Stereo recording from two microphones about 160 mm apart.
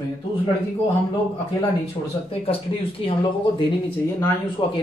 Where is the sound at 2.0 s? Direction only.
35° left (ahead or behind).